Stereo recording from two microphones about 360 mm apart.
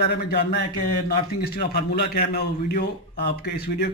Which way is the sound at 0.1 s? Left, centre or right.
Left.